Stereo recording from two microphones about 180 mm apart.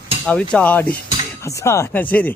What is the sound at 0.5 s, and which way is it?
Speech, 10° left (ahead or behind).